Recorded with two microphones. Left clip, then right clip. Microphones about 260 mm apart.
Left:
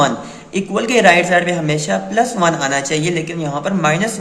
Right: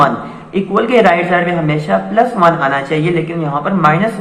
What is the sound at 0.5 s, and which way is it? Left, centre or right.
Speech, left.